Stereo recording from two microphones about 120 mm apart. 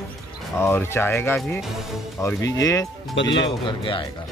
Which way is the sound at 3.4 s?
45° left (ahead or behind).